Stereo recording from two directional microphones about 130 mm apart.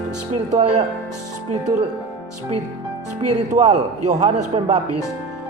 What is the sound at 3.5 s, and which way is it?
A man's voice, 60° right (ahead or behind).